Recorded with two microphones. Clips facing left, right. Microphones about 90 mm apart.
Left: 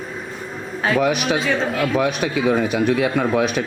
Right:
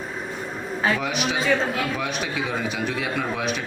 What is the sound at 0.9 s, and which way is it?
A man's voice, 55° left (ahead or behind).